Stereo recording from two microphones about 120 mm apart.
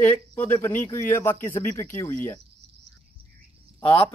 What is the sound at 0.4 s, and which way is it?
Speech, 20° left (ahead or behind).